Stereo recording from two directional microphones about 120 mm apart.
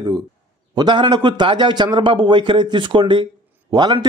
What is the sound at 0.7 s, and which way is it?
Speech, 40° right (ahead or behind).